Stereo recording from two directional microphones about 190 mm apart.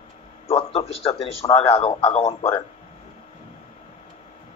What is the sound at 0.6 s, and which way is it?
A man's voice, 30° left (ahead or behind).